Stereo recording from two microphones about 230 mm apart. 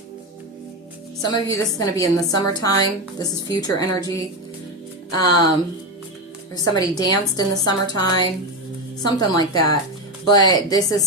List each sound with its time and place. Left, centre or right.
1.2 s a woman's voice: centre
6.7 s a woman's voice: centre